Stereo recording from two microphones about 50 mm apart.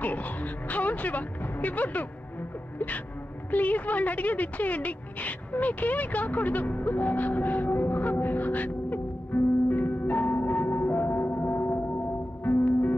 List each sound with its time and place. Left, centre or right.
0.0 s a woman's voice: left
3.5 s a sound: left
12.4 s music: left